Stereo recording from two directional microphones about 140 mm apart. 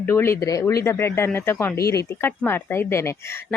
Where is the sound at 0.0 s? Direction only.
15° left (ahead or behind).